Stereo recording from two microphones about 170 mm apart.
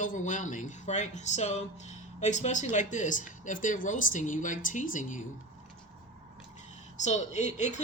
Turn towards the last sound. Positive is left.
turn(degrees=45)  # may be behind; listen again after turning